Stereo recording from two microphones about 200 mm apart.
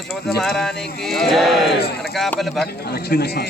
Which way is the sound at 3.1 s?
50° left (ahead or behind).